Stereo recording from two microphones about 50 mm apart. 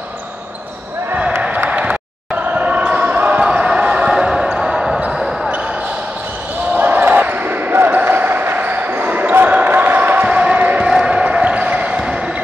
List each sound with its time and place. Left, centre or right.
1.7 s a sound: right
2.4 s basketball bounce: right
3.3 s basketball bounce: right; by 5.5 s centre
6.7 s basketball bounce: right
10.2 s music: right
10.9 s basketball bounce: centre